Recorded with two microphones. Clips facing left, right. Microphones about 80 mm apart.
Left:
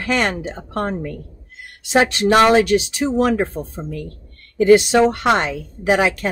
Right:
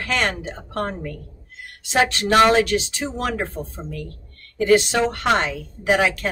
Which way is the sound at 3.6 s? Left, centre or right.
Left.